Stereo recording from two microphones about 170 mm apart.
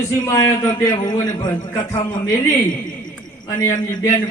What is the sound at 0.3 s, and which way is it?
A man's voice, 20° left (ahead or behind).